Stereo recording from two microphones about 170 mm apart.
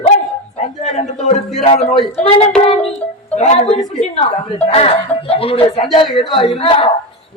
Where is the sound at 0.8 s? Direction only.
40° left (ahead or behind).